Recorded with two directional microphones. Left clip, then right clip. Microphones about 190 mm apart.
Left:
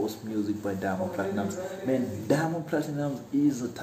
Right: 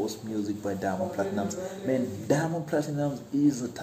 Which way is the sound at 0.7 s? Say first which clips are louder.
Even; 15° right (ahead or behind).